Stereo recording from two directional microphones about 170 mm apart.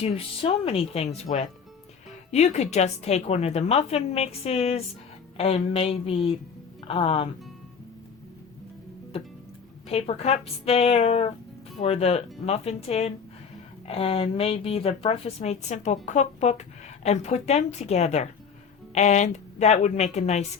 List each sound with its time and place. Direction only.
0.0 s a woman's voice: 35° left (ahead or behind)
9.9 s a woman's voice: 35° left (ahead or behind)